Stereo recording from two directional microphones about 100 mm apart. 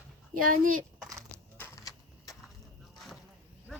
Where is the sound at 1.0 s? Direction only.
30° right (ahead or behind).